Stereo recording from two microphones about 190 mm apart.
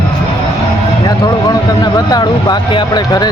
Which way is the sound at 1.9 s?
20° left (ahead or behind).